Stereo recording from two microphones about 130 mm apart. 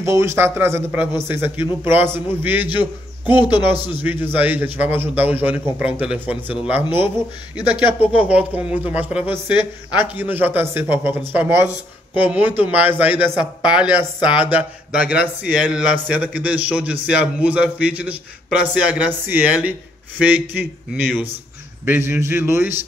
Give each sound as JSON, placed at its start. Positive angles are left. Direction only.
{"t": 0.0, "sound": "a man's voice", "side_deg": -20}